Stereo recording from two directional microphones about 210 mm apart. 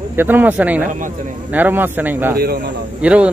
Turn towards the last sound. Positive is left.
turn(degrees=-5)  # may be behind; listen again after turning